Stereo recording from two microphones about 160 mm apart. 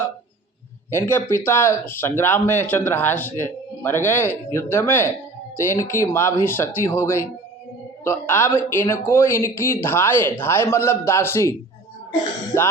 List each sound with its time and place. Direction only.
0.9 s speech: 15° left (ahead or behind)